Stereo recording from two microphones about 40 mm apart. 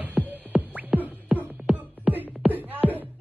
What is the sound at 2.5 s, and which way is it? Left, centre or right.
Music, right.